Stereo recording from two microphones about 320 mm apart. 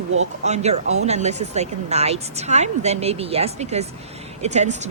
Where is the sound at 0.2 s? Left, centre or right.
Right.